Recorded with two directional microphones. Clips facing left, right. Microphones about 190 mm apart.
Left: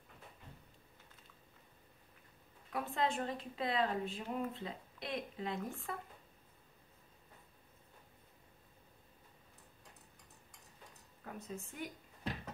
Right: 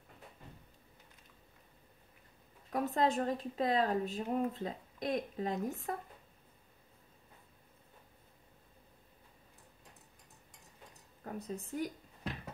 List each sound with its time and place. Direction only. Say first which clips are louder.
2.7 s speech: right 5 dB; 40° right (ahead or behind)
11.2 s speech: right 5 dB; 35° right (ahead or behind)